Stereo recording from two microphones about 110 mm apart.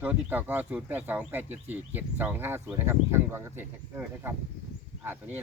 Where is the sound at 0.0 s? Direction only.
15° right (ahead or behind).